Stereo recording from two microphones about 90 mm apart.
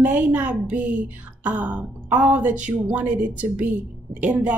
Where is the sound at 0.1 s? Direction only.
15° right (ahead or behind).